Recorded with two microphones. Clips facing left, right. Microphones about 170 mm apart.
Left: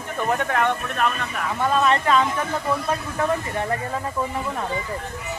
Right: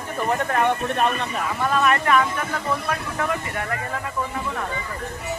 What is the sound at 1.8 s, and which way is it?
Speech, 20° left (ahead or behind).